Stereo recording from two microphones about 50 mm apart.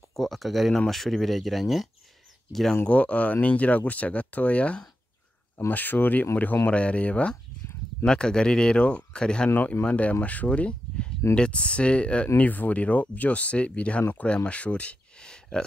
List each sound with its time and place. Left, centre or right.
0.1 s speech: centre
2.9 s speech: left
5.7 s speech: left
6.7 s speech: left
8.0 s speech: centre
12.4 s speech: left
15.2 s a sound: centre